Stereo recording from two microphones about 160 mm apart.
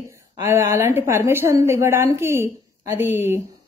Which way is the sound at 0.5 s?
15° right (ahead or behind).